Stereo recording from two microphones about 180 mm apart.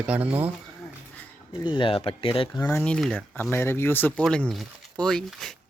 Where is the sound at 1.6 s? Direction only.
25° left (ahead or behind).